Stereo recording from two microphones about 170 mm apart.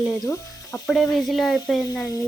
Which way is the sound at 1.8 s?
20° left (ahead or behind).